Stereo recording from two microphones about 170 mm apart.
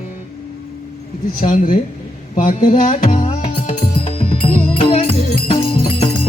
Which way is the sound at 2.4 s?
50° left (ahead or behind).